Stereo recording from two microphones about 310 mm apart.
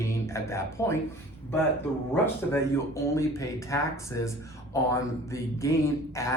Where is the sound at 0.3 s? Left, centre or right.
Centre.